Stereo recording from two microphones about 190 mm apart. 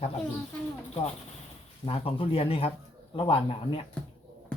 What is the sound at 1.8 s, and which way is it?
Speech, 30° left (ahead or behind).